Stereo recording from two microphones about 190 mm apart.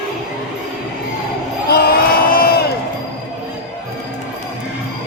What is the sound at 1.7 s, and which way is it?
Crowd, 55° left (ahead or behind).